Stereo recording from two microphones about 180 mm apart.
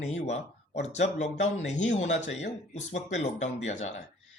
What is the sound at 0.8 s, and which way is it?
Speech, 40° left (ahead or behind).